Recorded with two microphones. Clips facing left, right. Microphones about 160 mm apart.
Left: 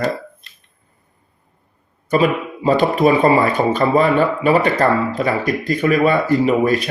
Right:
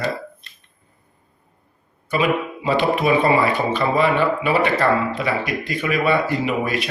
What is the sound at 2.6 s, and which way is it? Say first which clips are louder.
Speech: left 5 dB; 40° left (ahead or behind).